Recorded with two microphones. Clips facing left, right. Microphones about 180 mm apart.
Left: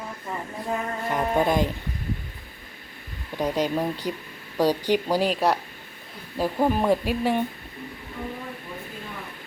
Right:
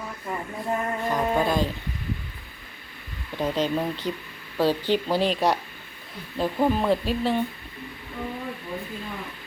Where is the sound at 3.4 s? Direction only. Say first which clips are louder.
Left 1 dB; 10° left (ahead or behind).